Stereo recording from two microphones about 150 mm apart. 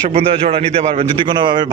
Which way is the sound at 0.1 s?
40° right (ahead or behind).